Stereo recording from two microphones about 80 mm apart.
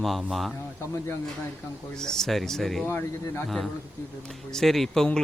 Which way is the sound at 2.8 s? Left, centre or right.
Left.